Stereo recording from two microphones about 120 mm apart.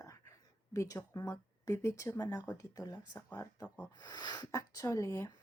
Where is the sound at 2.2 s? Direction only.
30° left (ahead or behind).